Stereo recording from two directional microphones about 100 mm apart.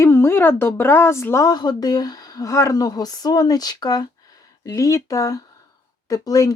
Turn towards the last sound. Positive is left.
turn(degrees=35)  # may be behind; listen again after turning